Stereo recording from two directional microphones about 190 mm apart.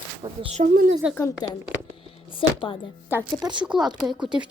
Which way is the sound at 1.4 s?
25° left (ahead or behind).